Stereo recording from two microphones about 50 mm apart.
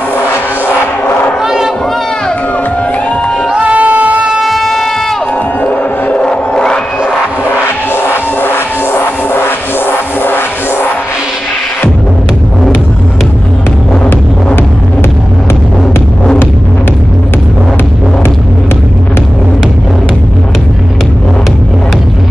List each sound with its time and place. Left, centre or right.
0.7 s music: left
1.4 s a sound: centre
3.4 s music: centre
4.4 s shofar: centre
5.6 s music: left
6.5 s music: centre
7.9 s music: left
9.8 s music: left